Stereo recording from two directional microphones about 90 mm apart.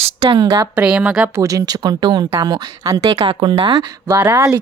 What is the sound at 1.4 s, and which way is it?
Speech, 40° right (ahead or behind).